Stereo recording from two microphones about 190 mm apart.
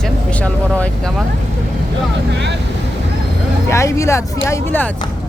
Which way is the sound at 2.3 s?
65° right (ahead or behind).